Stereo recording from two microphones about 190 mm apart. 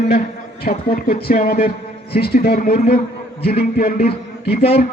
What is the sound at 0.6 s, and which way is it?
Speech, 50° left (ahead or behind).